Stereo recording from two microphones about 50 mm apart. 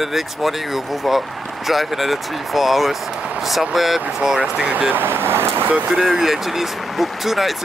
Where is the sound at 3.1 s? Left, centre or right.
Right.